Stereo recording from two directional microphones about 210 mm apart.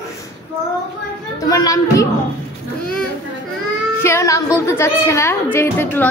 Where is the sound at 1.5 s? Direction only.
15° left (ahead or behind).